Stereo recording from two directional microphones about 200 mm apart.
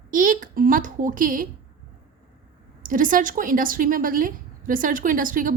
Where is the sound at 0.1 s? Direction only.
40° right (ahead or behind).